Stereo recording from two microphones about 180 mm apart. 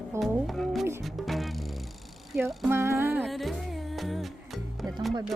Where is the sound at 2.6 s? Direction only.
15° right (ahead or behind).